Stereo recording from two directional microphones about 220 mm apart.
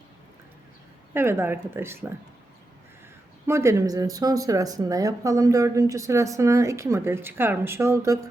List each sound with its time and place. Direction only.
1.1 s speech: 10° right (ahead or behind)
3.4 s speech: 10° right (ahead or behind)